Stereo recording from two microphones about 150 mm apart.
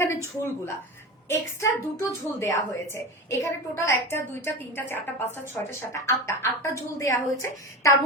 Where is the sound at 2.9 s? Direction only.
15° left (ahead or behind).